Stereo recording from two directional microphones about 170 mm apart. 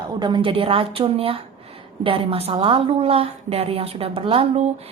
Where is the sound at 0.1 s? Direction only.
25° right (ahead or behind).